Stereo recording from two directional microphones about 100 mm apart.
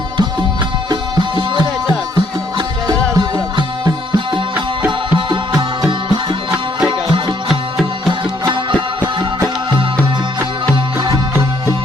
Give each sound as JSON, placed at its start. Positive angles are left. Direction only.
{"t": 0.9, "sound": "music", "side_deg": -45}
{"t": 4.9, "sound": "music", "side_deg": -50}
{"t": 7.4, "sound": "music", "side_deg": 0}